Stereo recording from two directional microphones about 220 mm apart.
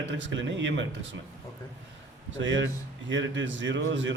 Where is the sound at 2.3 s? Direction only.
55° right (ahead or behind).